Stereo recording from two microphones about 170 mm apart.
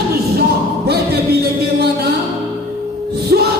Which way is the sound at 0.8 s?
70° right (ahead or behind).